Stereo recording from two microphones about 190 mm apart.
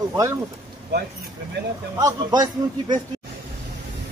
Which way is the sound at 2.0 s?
20° right (ahead or behind).